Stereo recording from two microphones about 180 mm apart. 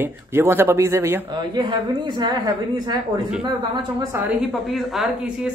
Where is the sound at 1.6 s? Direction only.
25° right (ahead or behind).